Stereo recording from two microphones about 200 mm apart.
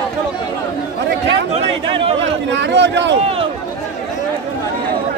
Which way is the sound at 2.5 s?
60° right (ahead or behind).